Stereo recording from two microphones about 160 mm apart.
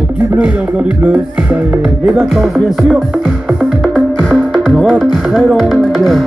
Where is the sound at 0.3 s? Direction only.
10° right (ahead or behind).